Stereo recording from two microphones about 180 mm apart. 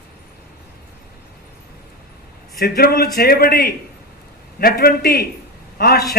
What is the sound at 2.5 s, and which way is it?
A man's voice, 55° left (ahead or behind).